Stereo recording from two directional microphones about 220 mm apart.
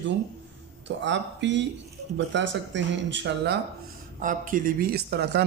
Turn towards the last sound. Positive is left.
turn(degrees=-50)  # may be behind; listen again after turning